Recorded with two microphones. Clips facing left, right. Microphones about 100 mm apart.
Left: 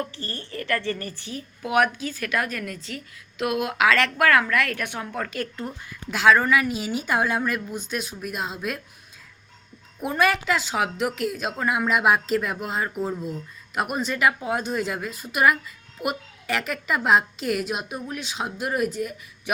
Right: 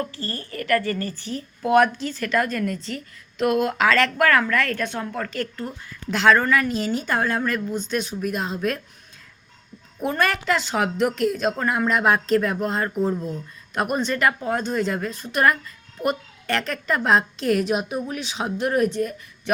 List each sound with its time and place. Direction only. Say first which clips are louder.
0.0 s a woman's voice: right 3 dB; 20° left (ahead or behind); by 5.3 s centre (ahead or behind)
5.3 s a woman's voice: right 2 dB; 15° left (ahead or behind)
10.0 s a woman's voice: even; 5° left (ahead or behind)